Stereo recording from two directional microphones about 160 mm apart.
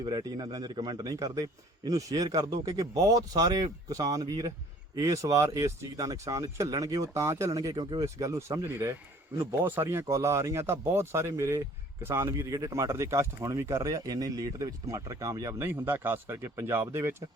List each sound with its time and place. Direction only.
0.0 s speech: 25° right (ahead or behind)